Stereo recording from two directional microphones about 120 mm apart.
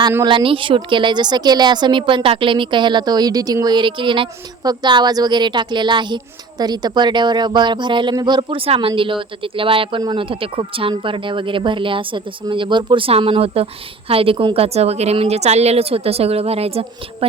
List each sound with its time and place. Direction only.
0.3 s a woman's voice: 45° right (ahead or behind)